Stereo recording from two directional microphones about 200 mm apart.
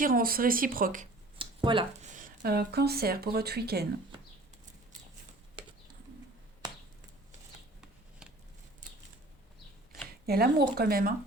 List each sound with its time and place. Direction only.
0.0 s speech: 45° right (ahead or behind)
1.4 s a sound: 25° right (ahead or behind)
2.0 s speech: 40° right (ahead or behind)
10.2 s speech: 50° right (ahead or behind)